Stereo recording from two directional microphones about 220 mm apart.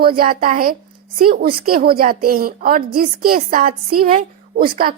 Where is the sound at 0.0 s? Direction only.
40° right (ahead or behind).